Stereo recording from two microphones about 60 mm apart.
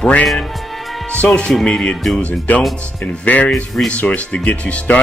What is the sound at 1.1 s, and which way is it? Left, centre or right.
Speech, centre.